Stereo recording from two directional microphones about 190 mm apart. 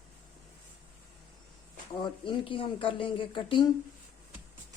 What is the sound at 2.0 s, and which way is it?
Speech, 25° left (ahead or behind).